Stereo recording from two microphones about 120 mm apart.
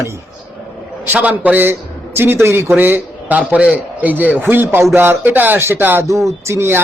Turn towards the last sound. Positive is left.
turn(degrees=-20)  # may be behind; listen again after turning